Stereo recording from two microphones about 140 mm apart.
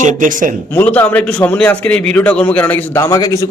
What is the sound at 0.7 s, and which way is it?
A man's voice, 15° left (ahead or behind).